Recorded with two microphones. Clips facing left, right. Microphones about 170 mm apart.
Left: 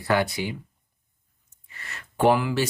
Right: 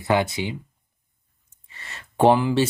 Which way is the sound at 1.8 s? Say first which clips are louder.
Right 4 dB; 30° right (ahead or behind).